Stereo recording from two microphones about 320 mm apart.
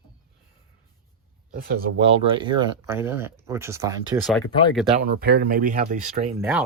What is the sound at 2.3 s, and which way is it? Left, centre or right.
Speech, centre.